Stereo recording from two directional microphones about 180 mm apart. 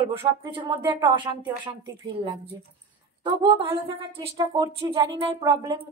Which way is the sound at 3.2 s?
25° right (ahead or behind).